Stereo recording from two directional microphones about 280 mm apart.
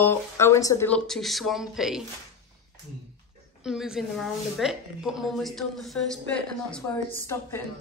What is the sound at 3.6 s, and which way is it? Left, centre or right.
A woman's voice, centre.